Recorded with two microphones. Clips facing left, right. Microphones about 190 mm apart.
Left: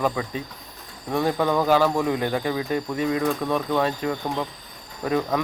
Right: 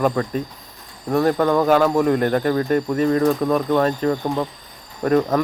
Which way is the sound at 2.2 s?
50° right (ahead or behind).